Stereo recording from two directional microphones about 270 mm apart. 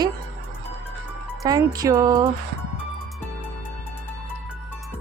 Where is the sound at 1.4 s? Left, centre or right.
Centre.